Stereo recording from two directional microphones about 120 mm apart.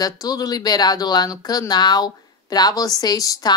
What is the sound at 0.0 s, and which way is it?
Speech, 30° left (ahead or behind).